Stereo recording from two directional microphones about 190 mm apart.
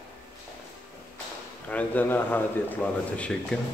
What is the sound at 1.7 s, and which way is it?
A man's voice, 10° left (ahead or behind).